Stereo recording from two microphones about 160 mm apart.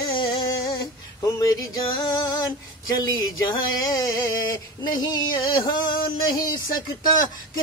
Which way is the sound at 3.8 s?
25° left (ahead or behind).